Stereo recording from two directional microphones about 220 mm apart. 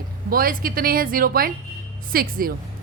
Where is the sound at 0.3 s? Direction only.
40° right (ahead or behind).